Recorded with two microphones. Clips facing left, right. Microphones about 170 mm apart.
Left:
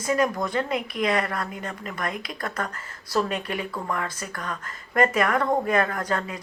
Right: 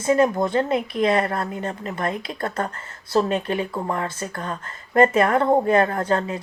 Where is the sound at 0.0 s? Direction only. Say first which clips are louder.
Right 5 dB; 25° right (ahead or behind).